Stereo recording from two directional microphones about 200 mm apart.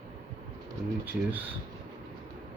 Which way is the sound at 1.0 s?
10° right (ahead or behind).